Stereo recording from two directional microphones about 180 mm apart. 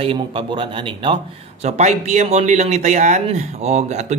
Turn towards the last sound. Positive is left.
turn(degrees=-40)  # may be behind; listen again after turning